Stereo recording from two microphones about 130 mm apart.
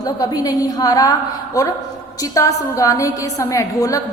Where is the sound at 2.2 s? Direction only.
25° left (ahead or behind).